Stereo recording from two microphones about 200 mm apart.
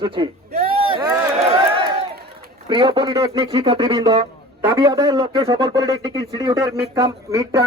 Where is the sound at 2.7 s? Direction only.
25° right (ahead or behind).